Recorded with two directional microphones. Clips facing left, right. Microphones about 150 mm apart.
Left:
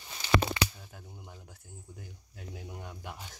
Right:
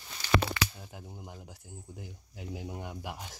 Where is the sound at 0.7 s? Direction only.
15° right (ahead or behind).